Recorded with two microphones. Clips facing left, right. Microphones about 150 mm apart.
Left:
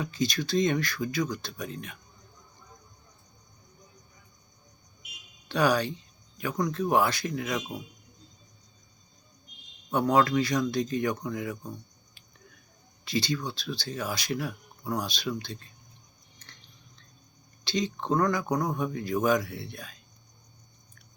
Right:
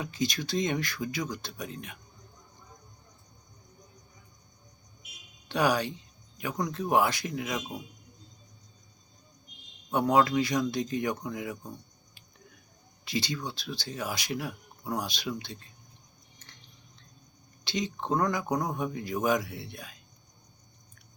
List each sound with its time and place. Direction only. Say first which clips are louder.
0.0 s speech: left 2 dB; 15° right (ahead or behind)
5.5 s speech: left 2 dB; 15° right (ahead or behind)
9.9 s speech: left 1 dB; 10° right (ahead or behind)
13.1 s speech: left 3 dB; 20° right (ahead or behind)
16.4 s a sound: left 1 dB; 15° right (ahead or behind)
17.7 s speech: left 2 dB; 15° right (ahead or behind)